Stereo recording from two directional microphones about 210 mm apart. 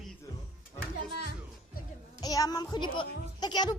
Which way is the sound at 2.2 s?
15° left (ahead or behind).